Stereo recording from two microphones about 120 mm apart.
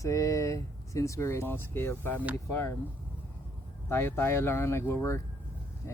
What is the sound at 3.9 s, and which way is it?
Speech, 20° left (ahead or behind).